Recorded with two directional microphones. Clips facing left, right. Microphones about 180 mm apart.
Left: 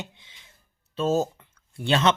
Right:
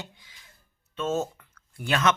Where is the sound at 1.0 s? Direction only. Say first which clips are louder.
Left 4 dB; 35° left (ahead or behind).